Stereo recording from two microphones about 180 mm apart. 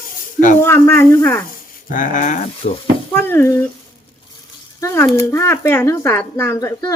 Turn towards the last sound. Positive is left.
turn(degrees=15)  # may be behind; listen again after turning